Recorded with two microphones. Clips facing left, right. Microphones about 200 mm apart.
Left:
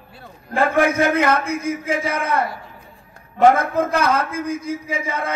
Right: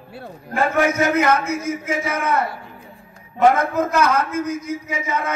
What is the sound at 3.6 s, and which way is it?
A man's voice, 30° left (ahead or behind).